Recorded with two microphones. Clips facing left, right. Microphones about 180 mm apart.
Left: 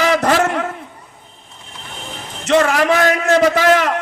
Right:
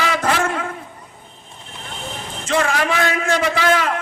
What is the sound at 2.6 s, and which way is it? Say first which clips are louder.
A man's voice: left 4 dB; 40° left (ahead or behind).